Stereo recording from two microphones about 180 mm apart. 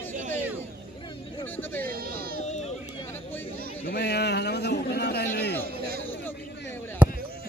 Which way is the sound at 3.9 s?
65° left (ahead or behind).